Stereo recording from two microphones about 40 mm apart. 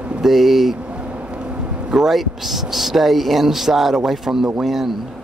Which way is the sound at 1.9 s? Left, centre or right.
Centre.